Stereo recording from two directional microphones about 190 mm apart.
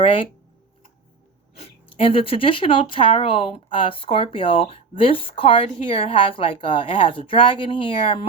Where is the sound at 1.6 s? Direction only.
30° left (ahead or behind).